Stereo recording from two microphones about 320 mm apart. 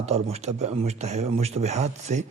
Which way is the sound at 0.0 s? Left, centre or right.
Centre.